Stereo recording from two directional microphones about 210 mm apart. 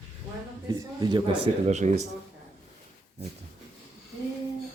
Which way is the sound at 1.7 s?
35° right (ahead or behind).